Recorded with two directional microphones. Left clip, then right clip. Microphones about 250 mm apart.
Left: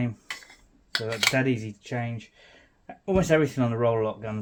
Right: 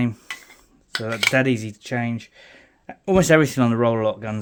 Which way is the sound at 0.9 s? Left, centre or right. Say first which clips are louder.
Right 3 dB; centre.